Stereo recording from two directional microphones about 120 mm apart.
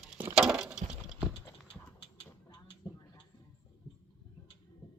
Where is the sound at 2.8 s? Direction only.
35° left (ahead or behind).